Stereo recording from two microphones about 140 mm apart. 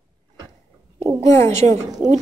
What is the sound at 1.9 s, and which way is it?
Speech, 30° right (ahead or behind).